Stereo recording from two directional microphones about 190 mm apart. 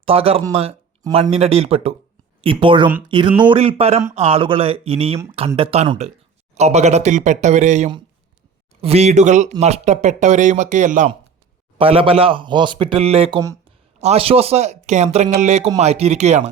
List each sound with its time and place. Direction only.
0.0 s speech: 30° right (ahead or behind)
11.8 s speech: 30° right (ahead or behind)